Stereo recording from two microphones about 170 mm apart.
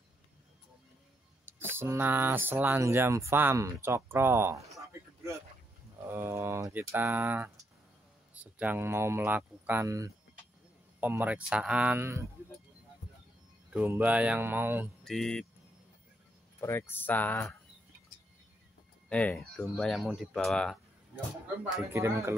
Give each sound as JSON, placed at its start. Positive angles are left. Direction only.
{"t": 1.4, "sound": "speech", "side_deg": -15}
{"t": 6.0, "sound": "speech", "side_deg": -15}
{"t": 13.7, "sound": "speech", "side_deg": -10}
{"t": 15.0, "sound": "speech", "side_deg": 0}
{"t": 16.6, "sound": "speech", "side_deg": 15}
{"t": 19.0, "sound": "speech", "side_deg": 5}
{"t": 21.9, "sound": "speech", "side_deg": -15}